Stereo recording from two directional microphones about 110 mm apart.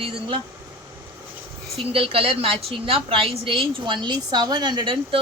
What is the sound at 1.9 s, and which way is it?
A woman's voice, 60° right (ahead or behind).